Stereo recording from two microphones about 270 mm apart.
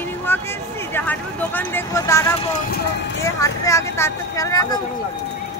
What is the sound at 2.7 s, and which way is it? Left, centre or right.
Speech, left.